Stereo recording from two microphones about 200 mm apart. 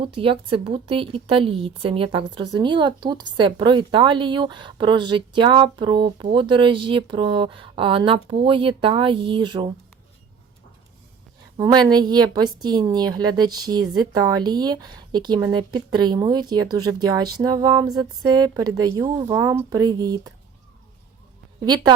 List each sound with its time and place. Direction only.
0.0 s speech: 25° right (ahead or behind)
11.5 s speech: 20° right (ahead or behind)
21.6 s speech: 20° right (ahead or behind)